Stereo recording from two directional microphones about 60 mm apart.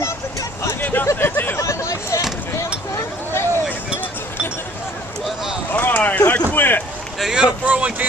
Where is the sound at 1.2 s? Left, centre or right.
Left.